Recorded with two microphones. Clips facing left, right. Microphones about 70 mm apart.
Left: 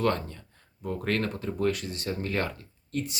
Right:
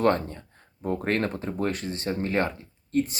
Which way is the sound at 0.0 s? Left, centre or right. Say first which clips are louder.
Right 4 dB; right.